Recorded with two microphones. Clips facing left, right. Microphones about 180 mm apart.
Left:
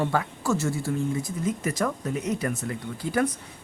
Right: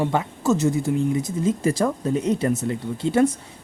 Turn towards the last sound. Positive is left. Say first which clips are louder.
# right 6 dB
turn(degrees=-25)  # may be behind; listen again after turning